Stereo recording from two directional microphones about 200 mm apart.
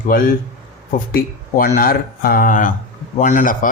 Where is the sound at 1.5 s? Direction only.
45° left (ahead or behind).